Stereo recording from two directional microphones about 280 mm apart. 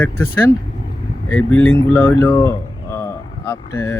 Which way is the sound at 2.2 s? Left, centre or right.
Centre.